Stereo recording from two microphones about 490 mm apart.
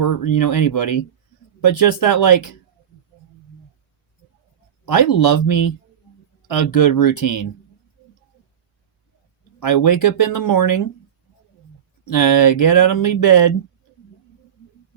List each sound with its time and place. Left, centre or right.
0.2 s speech: left
4.9 s speech: left
6.7 s speech: left
9.6 s speech: left
12.0 s speech: left